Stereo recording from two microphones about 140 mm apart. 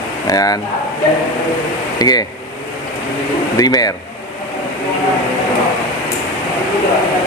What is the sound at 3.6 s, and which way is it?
Speech, 25° left (ahead or behind).